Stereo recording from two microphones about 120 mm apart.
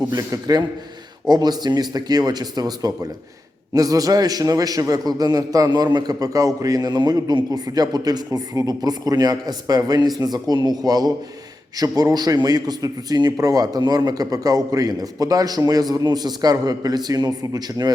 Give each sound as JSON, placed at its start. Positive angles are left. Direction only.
{"t": 0.1, "sound": "a man's voice", "side_deg": -30}